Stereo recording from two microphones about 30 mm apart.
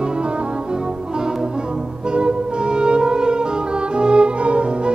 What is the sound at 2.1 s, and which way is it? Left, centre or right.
Music, right.